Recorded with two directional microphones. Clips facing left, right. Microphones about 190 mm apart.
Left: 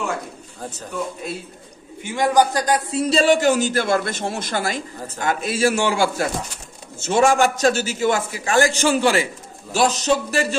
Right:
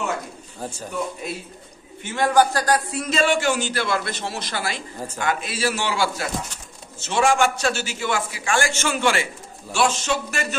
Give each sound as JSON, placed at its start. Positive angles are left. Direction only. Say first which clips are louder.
{"t": 0.6, "sound": "a man's voice", "louder": "right 1 dB", "side_deg": -10}
{"t": 2.0, "sound": "a man's voice", "louder": "left 1 dB", "side_deg": 15}